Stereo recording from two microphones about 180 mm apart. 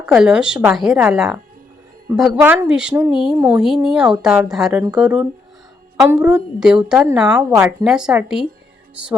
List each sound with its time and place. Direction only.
0.0 s a woman's voice: 5° right (ahead or behind)